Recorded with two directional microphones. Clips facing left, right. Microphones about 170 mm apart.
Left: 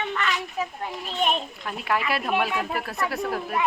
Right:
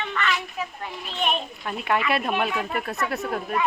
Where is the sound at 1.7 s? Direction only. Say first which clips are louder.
Right 2 dB; centre (ahead or behind).